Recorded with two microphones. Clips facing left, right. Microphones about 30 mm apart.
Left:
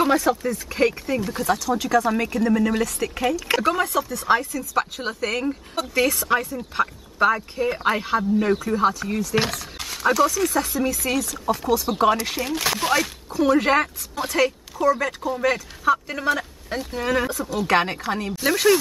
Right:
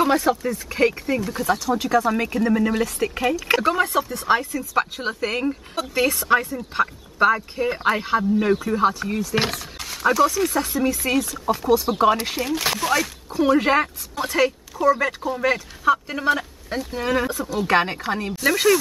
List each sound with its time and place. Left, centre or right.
0.1 s speech: centre
3.8 s speech: right
4.2 s speech: centre
9.8 s wild animals: centre
10.3 s speech: centre
12.3 s speech: centre
13.3 s speech: centre